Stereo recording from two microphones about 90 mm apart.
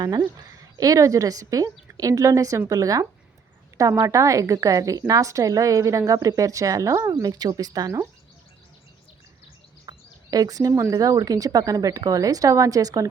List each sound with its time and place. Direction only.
0.0 s speech: 50° right (ahead or behind)
0.8 s a woman's voice: 40° right (ahead or behind)
9.9 s a sound: 45° right (ahead or behind)
10.3 s a woman's voice: 45° right (ahead or behind)